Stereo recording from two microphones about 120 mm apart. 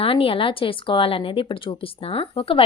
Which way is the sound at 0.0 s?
50° left (ahead or behind).